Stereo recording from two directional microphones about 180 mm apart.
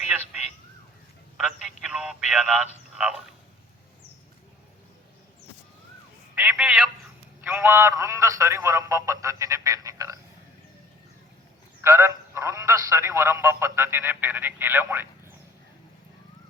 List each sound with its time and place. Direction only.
1.4 s a sound: 5° right (ahead or behind)
6.3 s telephone: 5° right (ahead or behind)
7.4 s a man's voice: 10° right (ahead or behind)
11.8 s speech: 15° right (ahead or behind)